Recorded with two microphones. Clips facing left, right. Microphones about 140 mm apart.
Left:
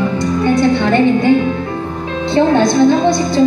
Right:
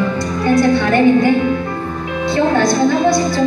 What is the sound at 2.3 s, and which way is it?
Speech, 20° left (ahead or behind).